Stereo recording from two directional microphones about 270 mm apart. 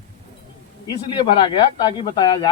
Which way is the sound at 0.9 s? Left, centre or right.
Centre.